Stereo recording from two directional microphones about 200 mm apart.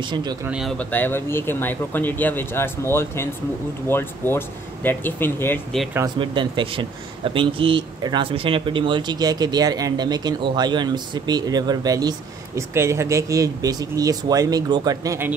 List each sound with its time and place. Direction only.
0.0 s speech: 20° right (ahead or behind)
0.5 s speech: centre (ahead or behind)
6.1 s speech: 25° right (ahead or behind)